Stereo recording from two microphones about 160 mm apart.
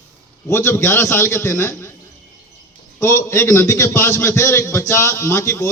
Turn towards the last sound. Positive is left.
turn(degrees=15)  # may be behind; listen again after turning